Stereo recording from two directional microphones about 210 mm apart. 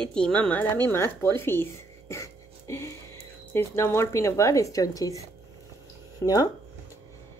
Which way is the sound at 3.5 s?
10° left (ahead or behind).